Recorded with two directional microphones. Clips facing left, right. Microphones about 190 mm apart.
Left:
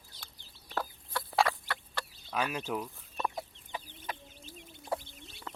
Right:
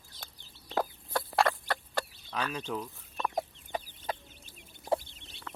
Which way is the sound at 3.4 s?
45° right (ahead or behind).